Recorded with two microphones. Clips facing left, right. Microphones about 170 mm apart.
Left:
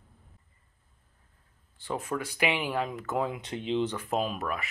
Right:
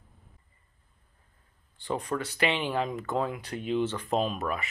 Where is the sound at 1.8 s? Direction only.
5° left (ahead or behind).